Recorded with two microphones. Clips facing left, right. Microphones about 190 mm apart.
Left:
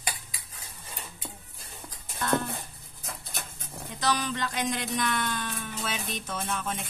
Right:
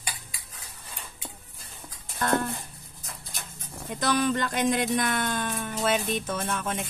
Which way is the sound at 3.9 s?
55° right (ahead or behind).